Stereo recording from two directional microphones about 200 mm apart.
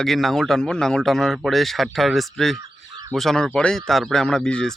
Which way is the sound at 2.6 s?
20° right (ahead or behind).